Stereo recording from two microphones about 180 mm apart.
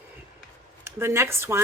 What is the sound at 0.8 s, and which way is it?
Speech, 15° right (ahead or behind).